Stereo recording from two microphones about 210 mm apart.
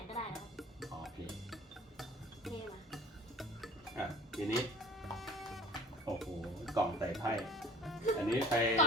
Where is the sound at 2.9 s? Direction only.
Centre (ahead or behind).